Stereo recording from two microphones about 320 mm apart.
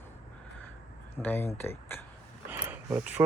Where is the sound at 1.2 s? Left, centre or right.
Centre.